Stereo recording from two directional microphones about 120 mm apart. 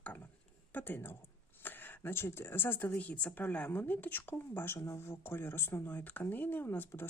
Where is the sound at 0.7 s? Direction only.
15° left (ahead or behind).